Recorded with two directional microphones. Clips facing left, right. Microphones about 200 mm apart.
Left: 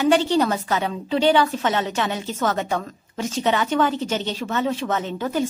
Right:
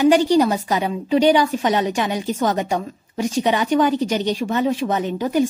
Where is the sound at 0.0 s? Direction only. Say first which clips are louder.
Right 4 dB; 15° right (ahead or behind).